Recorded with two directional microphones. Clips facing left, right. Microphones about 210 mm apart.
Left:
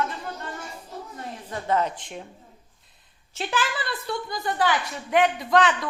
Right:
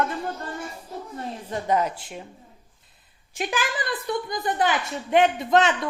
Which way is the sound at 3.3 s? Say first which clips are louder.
Right 1 dB; 15° right (ahead or behind).